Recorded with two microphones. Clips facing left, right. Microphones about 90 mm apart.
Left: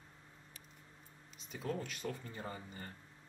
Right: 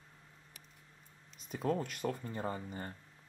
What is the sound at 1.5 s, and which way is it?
Speech, 50° right (ahead or behind).